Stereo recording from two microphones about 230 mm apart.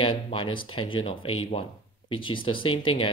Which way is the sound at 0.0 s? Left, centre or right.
Left.